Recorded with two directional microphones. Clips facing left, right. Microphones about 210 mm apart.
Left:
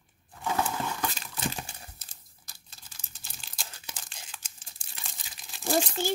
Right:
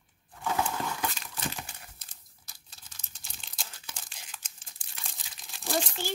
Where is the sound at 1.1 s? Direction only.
30° left (ahead or behind).